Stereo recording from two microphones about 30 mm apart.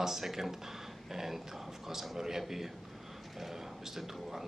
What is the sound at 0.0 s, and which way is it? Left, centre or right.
Speech, centre.